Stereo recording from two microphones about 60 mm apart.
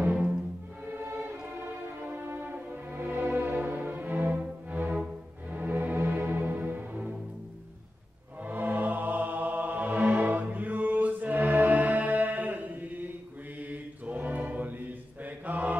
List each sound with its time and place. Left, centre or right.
0.8 s music: right
8.5 s music: right